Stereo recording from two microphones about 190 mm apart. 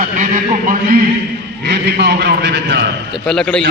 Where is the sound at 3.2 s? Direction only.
5° left (ahead or behind).